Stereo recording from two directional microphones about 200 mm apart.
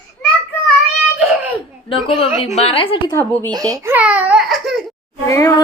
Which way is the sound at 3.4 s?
20° right (ahead or behind).